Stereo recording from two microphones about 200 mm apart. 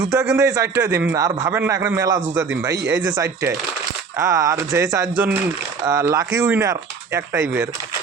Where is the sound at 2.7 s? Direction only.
65° right (ahead or behind).